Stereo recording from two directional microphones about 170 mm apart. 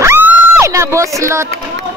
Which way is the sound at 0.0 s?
15° right (ahead or behind).